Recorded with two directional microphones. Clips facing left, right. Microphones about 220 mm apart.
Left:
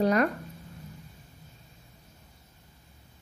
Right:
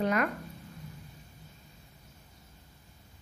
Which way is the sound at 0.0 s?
35° left (ahead or behind).